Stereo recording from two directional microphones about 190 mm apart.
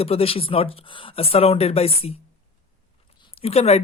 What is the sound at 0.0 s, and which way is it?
Speech, 30° left (ahead or behind).